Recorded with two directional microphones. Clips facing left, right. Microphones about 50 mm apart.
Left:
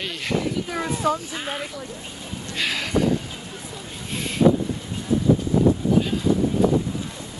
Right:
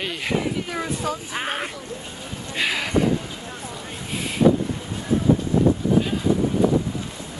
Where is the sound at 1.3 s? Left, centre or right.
Right.